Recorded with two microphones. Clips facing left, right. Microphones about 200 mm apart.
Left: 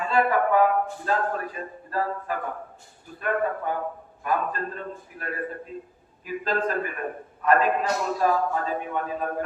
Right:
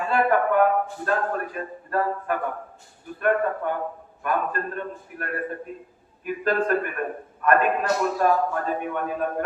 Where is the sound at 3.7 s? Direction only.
60° right (ahead or behind).